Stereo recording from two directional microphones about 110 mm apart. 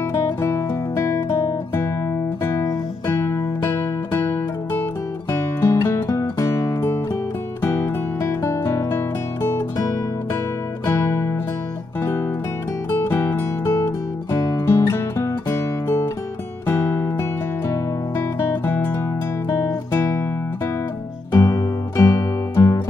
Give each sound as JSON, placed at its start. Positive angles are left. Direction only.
{"t": 0.1, "sound": "music", "side_deg": 25}
{"t": 10.9, "sound": "music", "side_deg": 25}
{"t": 12.9, "sound": "music", "side_deg": 20}
{"t": 19.5, "sound": "guitar", "side_deg": 25}
{"t": 21.3, "sound": "music", "side_deg": 30}